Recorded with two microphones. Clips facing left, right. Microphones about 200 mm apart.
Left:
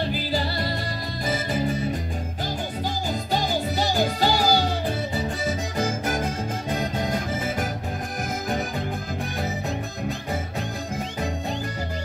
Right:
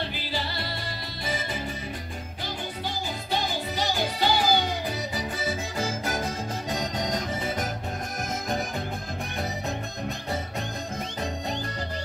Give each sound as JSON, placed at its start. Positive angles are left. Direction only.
{"t": 0.1, "sound": "music", "side_deg": 45}
{"t": 3.3, "sound": "music", "side_deg": 45}
{"t": 5.8, "sound": "music", "side_deg": 15}